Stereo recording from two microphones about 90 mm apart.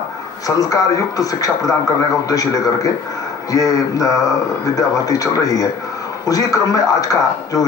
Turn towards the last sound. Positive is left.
turn(degrees=40)  # may be behind; listen again after turning